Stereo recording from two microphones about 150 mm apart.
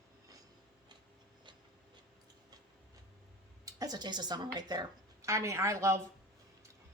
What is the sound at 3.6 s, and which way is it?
Speech, 25° right (ahead or behind).